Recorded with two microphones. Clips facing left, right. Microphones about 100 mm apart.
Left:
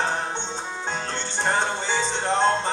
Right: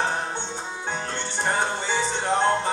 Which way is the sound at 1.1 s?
15° right (ahead or behind).